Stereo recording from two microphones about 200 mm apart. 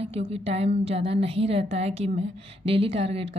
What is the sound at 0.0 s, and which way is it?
A woman's voice, 30° right (ahead or behind).